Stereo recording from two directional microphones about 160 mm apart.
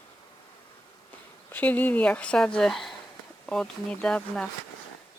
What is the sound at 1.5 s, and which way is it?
Speech, 10° left (ahead or behind).